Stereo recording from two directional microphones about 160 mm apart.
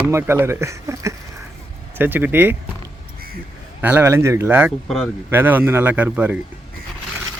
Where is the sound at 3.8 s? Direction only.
15° right (ahead or behind).